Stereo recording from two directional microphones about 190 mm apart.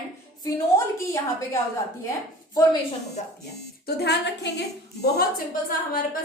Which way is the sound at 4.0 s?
60° left (ahead or behind).